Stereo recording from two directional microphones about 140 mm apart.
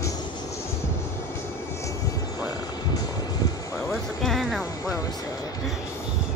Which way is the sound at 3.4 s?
25° left (ahead or behind).